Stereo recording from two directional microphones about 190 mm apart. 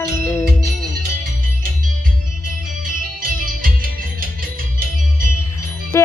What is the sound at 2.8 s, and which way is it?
Music, 50° right (ahead or behind).